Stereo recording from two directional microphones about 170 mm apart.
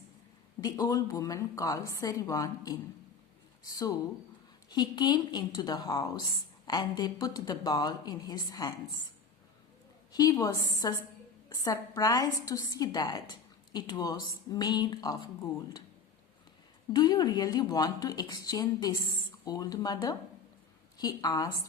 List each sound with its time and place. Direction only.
0.6 s a woman's voice: 20° left (ahead or behind)
10.1 s a woman's voice: 25° left (ahead or behind)
16.9 s a woman's voice: 25° left (ahead or behind)